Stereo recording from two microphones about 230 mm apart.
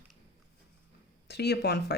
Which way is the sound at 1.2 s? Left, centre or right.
Left.